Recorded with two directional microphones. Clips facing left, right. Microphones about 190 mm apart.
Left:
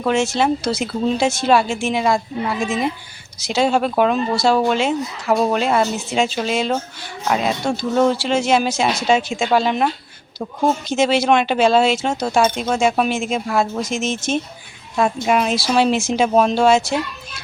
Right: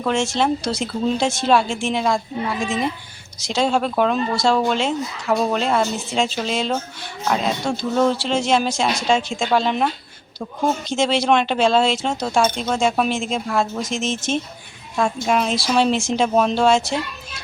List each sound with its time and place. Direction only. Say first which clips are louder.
0.0 s speech: left 2 dB; 5° left (ahead or behind)
3.4 s speech: left 2 dB; 5° left (ahead or behind)
5.3 s speech: left 2 dB; 15° left (ahead or behind)
5.5 s speech: left 2 dB; 5° left (ahead or behind)